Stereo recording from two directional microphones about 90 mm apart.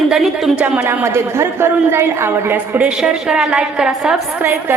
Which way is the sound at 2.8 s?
10° right (ahead or behind).